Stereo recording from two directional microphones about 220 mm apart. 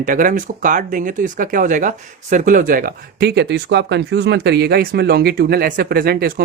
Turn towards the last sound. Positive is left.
turn(degrees=-45)  # may be behind; listen again after turning